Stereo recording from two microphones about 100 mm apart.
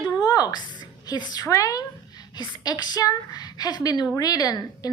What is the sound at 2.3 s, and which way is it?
A woman's voice, 45° left (ahead or behind).